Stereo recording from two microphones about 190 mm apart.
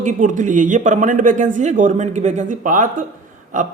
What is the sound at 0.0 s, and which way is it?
A man's voice, 40° right (ahead or behind).